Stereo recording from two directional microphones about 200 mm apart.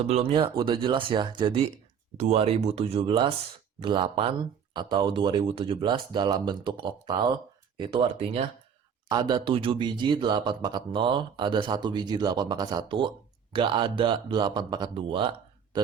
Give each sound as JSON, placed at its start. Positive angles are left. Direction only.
{"t": 0.0, "sound": "speech", "side_deg": -30}